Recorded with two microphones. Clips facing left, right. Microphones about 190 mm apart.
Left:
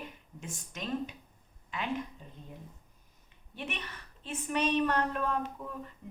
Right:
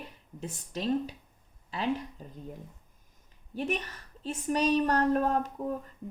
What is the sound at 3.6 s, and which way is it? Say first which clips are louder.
A woman's voice: right 8 dB; 40° right (ahead or behind).